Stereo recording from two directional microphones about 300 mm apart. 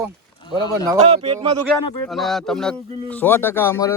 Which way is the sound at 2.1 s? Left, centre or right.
Centre.